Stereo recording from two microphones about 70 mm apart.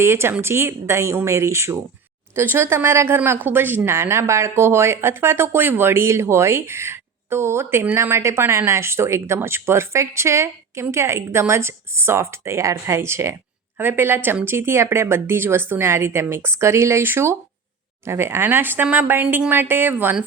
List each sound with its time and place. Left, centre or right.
0.0 s speech: right